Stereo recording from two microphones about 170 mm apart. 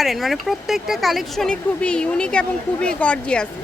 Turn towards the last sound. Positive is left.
turn(degrees=5)  # may be behind; listen again after turning